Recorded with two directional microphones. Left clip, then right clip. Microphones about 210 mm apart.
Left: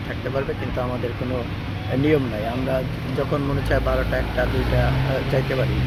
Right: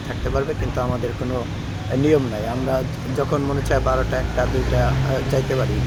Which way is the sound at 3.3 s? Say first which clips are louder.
Right 2 dB; 25° right (ahead or behind).